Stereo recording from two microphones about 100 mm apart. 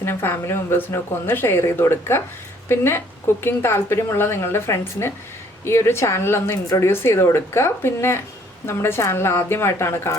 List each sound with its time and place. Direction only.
0.0 s speech: 25° left (ahead or behind)